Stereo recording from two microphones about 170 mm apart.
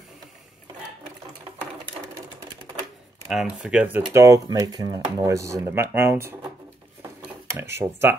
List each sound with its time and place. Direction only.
3.3 s speech: 5° right (ahead or behind)
7.5 s speech: 15° right (ahead or behind)